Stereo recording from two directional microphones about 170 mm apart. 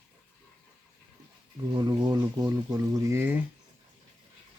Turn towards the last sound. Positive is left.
turn(degrees=-15)  # may be behind; listen again after turning